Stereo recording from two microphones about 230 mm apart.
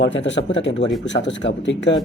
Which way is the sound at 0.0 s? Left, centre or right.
Left.